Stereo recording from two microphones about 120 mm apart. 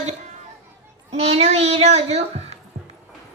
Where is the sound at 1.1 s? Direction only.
60° right (ahead or behind).